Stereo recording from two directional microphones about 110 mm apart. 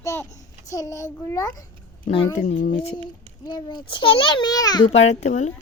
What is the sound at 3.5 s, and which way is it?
A child's voice, 40° left (ahead or behind).